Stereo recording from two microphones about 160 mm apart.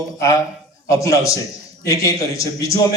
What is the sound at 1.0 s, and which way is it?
A man's voice, 20° left (ahead or behind).